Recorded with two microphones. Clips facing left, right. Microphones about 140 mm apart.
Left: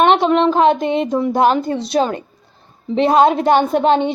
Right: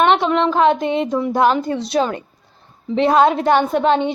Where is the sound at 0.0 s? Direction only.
25° left (ahead or behind).